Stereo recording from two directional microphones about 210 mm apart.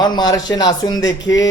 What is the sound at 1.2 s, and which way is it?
Speech, 60° left (ahead or behind).